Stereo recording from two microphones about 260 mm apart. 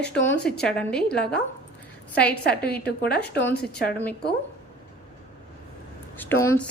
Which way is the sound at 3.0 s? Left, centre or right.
Left.